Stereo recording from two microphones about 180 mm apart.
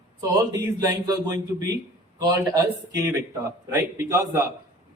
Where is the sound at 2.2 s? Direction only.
20° right (ahead or behind).